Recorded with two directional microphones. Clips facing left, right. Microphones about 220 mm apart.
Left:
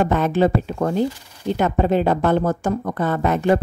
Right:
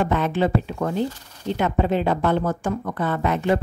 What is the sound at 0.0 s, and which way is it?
A woman's voice, 45° left (ahead or behind).